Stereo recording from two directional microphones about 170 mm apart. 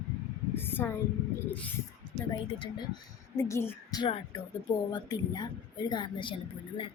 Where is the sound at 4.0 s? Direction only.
25° left (ahead or behind).